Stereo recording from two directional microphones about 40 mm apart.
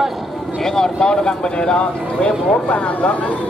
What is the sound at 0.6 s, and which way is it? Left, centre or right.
Speech, centre.